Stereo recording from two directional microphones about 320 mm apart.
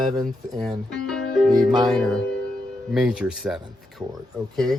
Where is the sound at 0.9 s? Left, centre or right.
Centre.